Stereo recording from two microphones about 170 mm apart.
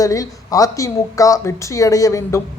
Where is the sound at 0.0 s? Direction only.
20° left (ahead or behind).